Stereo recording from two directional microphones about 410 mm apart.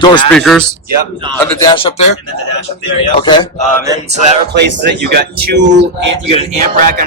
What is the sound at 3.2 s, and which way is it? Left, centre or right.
Music, centre.